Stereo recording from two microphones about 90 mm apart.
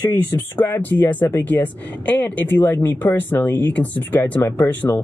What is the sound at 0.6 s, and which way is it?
Speech, 20° left (ahead or behind).